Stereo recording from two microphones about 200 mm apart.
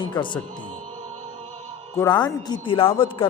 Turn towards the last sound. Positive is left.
turn(degrees=25)  # may be behind; listen again after turning